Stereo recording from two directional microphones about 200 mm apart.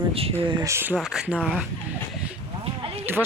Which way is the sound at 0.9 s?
Centre (ahead or behind).